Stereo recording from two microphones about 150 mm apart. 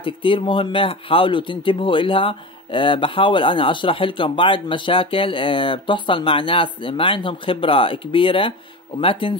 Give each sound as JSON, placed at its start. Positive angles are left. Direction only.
{"t": 0.0, "sound": "speech", "side_deg": 35}